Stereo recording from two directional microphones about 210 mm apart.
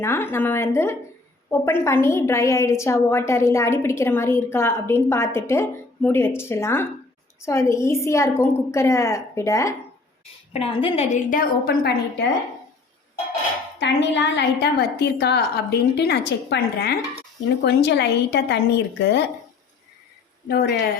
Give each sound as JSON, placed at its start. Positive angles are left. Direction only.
{"t": 0.0, "sound": "a woman's voice", "side_deg": 10}
{"t": 10.5, "sound": "a woman's voice", "side_deg": 25}
{"t": 13.7, "sound": "a woman's voice", "side_deg": 55}
{"t": 20.5, "sound": "a woman's voice", "side_deg": 45}